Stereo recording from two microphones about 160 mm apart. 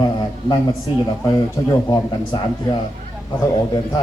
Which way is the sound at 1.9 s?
25° left (ahead or behind).